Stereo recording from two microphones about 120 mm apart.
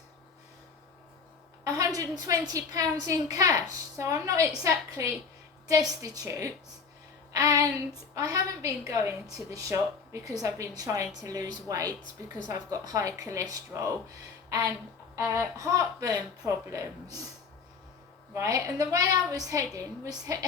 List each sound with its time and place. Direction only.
1.6 s a woman's voice: 30° right (ahead or behind)
15.1 s a woman's voice: 25° right (ahead or behind)
18.3 s a woman's voice: 25° right (ahead or behind)